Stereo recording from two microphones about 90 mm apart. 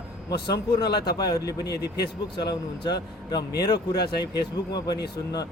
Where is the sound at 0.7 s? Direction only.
50° left (ahead or behind).